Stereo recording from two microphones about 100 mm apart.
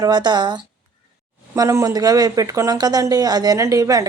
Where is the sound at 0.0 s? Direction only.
45° right (ahead or behind).